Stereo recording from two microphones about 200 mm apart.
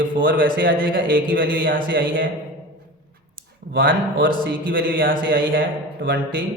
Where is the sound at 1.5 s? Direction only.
70° right (ahead or behind).